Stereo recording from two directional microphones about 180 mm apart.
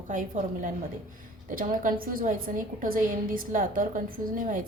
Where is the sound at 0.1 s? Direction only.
45° right (ahead or behind).